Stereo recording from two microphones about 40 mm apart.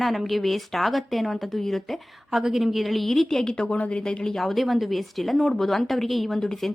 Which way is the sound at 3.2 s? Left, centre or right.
Centre.